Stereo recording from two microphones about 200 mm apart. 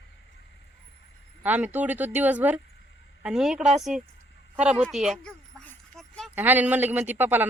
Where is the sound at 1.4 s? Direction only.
10° right (ahead or behind).